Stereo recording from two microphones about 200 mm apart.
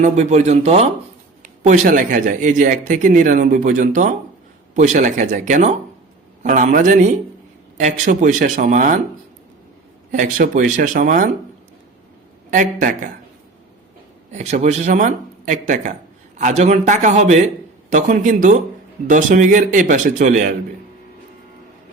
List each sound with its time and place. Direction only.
0.0 s speech: 35° right (ahead or behind)
10.1 s speech: 40° right (ahead or behind)
12.5 s speech: 40° right (ahead or behind)
14.3 s speech: 35° right (ahead or behind)